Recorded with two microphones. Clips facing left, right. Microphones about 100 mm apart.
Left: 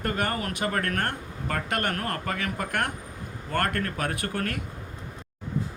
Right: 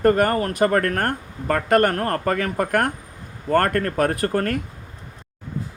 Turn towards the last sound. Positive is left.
turn(degrees=-40)  # may be behind; listen again after turning